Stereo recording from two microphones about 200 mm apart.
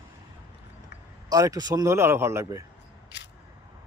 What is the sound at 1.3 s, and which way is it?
Speech, 20° right (ahead or behind).